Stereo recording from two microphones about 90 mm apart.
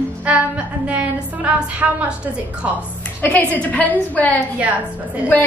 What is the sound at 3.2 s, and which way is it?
A woman's voice, 15° left (ahead or behind).